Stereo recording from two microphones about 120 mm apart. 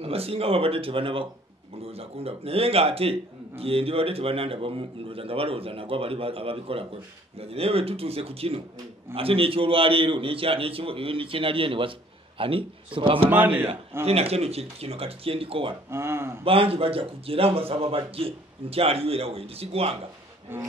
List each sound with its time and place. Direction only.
0.0 s a man's voice: 55° right (ahead or behind)
13.3 s a man's voice: 15° right (ahead or behind)
14.0 s speech: 60° right (ahead or behind)
15.9 s speech: 20° right (ahead or behind)
16.4 s a man's voice: 50° right (ahead or behind)
20.5 s a man's voice: 20° right (ahead or behind)